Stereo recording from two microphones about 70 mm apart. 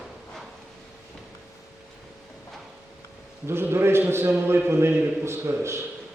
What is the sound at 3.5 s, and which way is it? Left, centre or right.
A man's voice, right.